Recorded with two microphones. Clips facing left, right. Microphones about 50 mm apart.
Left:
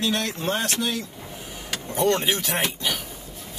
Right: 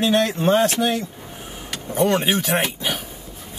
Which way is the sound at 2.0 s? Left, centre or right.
Right.